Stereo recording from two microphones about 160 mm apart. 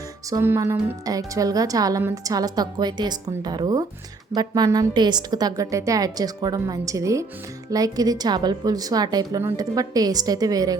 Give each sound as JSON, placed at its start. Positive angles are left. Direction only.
{"t": 0.3, "sound": "a woman's voice", "side_deg": -20}